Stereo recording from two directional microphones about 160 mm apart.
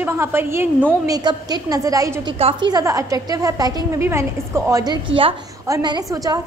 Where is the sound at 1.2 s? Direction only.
25° right (ahead or behind).